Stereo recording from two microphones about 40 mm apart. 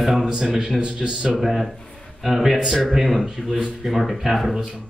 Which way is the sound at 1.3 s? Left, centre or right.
Centre.